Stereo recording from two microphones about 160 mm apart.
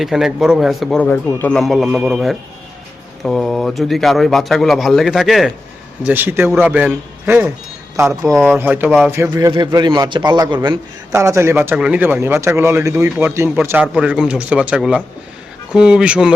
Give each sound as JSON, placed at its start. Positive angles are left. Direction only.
{"t": 0.0, "sound": "speech", "side_deg": -5}
{"t": 1.0, "sound": "speech", "side_deg": 10}
{"t": 6.1, "sound": "a man's voice", "side_deg": -10}